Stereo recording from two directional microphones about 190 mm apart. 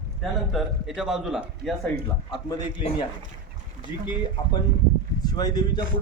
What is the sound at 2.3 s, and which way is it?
Speech, 25° left (ahead or behind).